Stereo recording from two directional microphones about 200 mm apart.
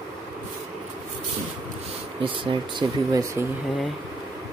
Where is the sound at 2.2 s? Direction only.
25° right (ahead or behind).